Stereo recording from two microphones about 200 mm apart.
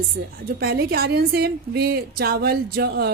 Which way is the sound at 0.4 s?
50° right (ahead or behind).